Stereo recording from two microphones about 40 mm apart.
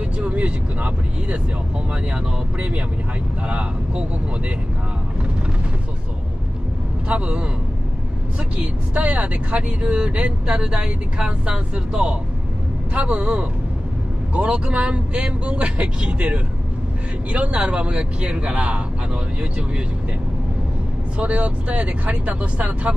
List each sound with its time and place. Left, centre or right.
0.2 s speech: right
7.1 s speech: right
8.9 s speech: right
21.2 s speech: right